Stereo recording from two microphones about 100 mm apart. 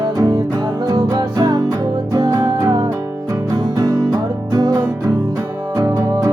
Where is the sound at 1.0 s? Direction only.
40° right (ahead or behind).